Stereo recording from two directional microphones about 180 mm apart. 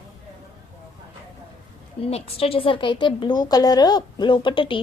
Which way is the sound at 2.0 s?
35° left (ahead or behind).